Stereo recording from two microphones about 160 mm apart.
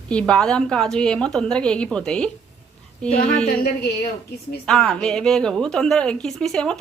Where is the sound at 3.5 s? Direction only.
70° left (ahead or behind).